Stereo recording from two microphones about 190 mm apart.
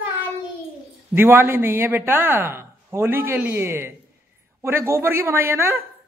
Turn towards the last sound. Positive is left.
turn(degrees=-10)  # may be behind; listen again after turning